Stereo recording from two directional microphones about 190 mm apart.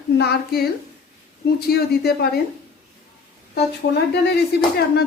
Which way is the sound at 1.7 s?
55° left (ahead or behind).